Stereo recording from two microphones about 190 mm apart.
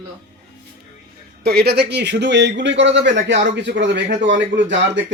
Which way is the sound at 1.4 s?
55° right (ahead or behind).